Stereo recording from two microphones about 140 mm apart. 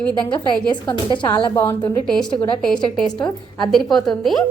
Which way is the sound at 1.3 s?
15° left (ahead or behind).